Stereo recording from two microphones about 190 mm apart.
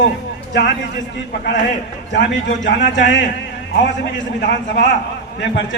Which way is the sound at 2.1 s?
70° left (ahead or behind).